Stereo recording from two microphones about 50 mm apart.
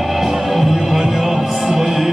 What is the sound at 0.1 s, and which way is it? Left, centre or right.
Music, centre.